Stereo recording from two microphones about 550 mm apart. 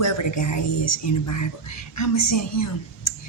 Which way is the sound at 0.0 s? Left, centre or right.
Left.